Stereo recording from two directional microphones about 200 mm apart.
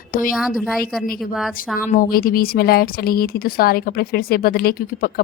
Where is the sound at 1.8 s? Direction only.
45° left (ahead or behind).